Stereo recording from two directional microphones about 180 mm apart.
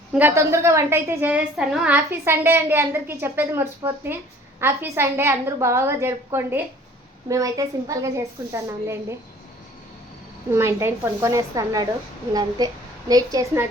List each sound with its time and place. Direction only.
0.1 s a woman's voice: 10° right (ahead or behind)
10.5 s a woman's voice: 15° right (ahead or behind)